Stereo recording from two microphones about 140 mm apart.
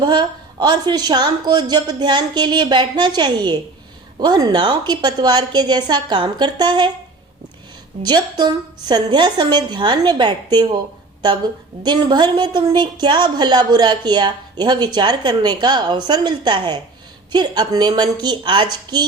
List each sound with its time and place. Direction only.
0.0 s a woman's voice: 30° right (ahead or behind)
8.0 s a woman's voice: 30° right (ahead or behind)
11.8 s a woman's voice: 30° right (ahead or behind)